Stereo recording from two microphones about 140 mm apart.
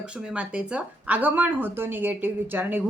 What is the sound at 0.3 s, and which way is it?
Speech, 10° right (ahead or behind).